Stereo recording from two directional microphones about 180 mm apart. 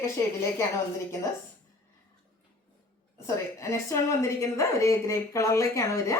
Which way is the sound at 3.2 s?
15° left (ahead or behind).